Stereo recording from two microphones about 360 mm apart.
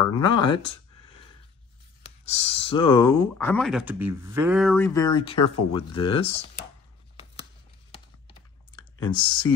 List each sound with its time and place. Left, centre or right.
0.2 s a sound: centre
2.2 s speech: centre
9.0 s speech: centre